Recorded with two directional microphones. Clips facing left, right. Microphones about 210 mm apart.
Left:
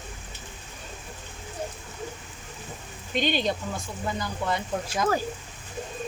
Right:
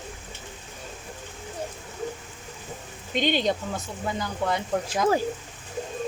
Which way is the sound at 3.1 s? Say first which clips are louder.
Right 2 dB; 20° right (ahead or behind).